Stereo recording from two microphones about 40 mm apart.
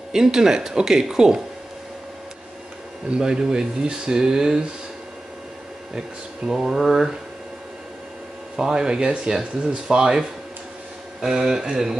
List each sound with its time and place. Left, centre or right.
0.1 s speech: centre
3.2 s speech: centre
6.5 s speech: centre
8.5 s speech: centre